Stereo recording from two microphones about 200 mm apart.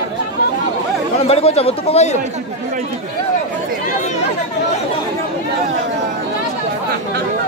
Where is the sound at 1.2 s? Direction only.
30° left (ahead or behind).